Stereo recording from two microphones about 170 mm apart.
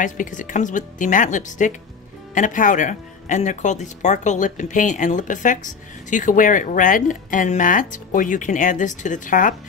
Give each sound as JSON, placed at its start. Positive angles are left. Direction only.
{"t": 0.0, "sound": "speech", "side_deg": 50}